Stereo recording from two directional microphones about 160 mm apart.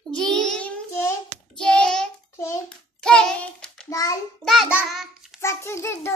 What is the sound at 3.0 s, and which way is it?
Music, 5° left (ahead or behind).